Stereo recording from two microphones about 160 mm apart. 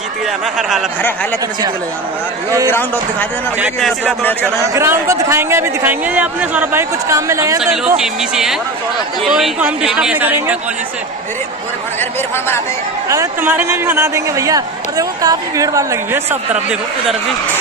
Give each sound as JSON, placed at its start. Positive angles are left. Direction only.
{"t": 0.6, "sound": "speech", "side_deg": -5}
{"t": 2.6, "sound": "speech", "side_deg": 15}
{"t": 3.5, "sound": "a man's voice", "side_deg": -10}
{"t": 4.2, "sound": "speech", "side_deg": 10}
{"t": 4.7, "sound": "a man's voice", "side_deg": -20}
{"t": 7.6, "sound": "a man's voice", "side_deg": -5}
{"t": 13.1, "sound": "a man's voice", "side_deg": -15}